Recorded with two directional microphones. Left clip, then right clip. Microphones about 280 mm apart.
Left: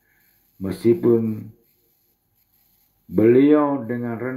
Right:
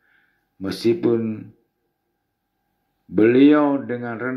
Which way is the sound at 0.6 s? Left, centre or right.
Right.